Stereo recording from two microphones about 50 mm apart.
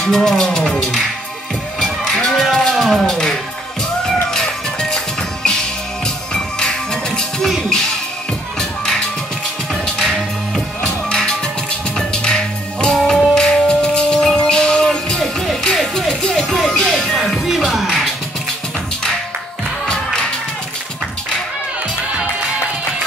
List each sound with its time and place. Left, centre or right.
0.0 s speech: centre
1.8 s music: centre
2.7 s speech: centre
4.3 s music: centre
8.5 s music: centre
10.8 s music: centre
17.2 s music: centre